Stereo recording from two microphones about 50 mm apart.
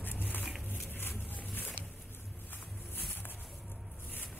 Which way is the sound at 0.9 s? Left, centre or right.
Left.